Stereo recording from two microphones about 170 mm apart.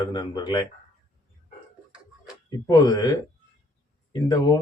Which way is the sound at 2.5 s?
25° left (ahead or behind).